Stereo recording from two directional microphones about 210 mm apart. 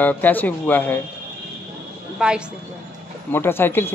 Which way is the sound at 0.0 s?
10° left (ahead or behind).